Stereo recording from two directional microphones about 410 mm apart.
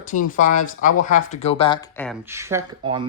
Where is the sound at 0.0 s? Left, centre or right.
Centre.